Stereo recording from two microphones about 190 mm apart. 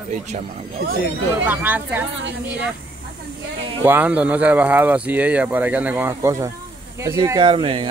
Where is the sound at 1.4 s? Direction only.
10° right (ahead or behind).